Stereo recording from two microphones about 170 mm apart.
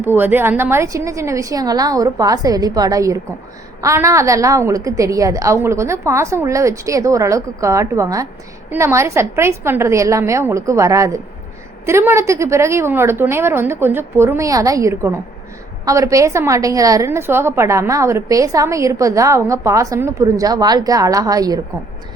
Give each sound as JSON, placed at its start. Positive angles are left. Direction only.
{"t": 0.0, "sound": "a woman's voice", "side_deg": -10}